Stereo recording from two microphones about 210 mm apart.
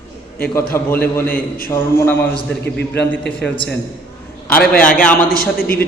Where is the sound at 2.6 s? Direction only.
55° left (ahead or behind).